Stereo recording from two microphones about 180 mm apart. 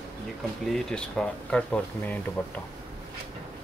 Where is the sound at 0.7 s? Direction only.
5° left (ahead or behind).